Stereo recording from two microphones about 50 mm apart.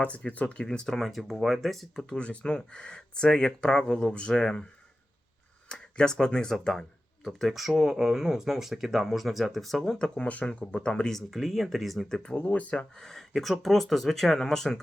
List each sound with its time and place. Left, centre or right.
0.0 s speech: left
0.9 s speech: centre
2.1 s speech: left
5.6 s speech: centre
7.3 s speech: centre
10.0 s speech: left
11.0 s speech: centre
12.0 s speech: centre
12.5 s speech: left
12.7 s speech: centre